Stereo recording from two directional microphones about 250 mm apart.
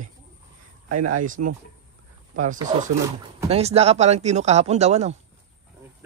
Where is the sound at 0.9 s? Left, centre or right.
Right.